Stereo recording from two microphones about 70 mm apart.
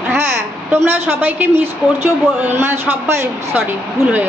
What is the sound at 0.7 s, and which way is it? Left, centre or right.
A man's voice, right.